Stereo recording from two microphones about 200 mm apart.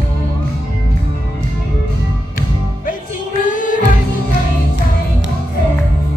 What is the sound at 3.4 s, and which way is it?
Music, 40° left (ahead or behind).